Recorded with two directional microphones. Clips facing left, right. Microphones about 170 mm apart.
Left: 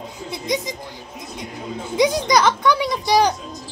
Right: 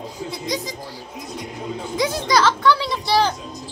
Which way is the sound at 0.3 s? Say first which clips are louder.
Left 4 dB; 20° left (ahead or behind).